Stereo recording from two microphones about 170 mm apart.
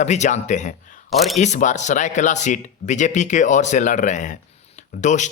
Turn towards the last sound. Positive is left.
turn(degrees=45)  # may be behind; listen again after turning